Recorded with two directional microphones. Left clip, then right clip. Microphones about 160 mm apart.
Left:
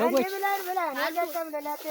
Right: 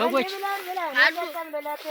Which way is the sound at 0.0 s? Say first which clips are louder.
Right 1 dB; 15° left (ahead or behind).